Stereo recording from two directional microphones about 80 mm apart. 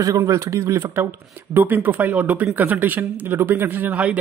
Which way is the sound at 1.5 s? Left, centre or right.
Right.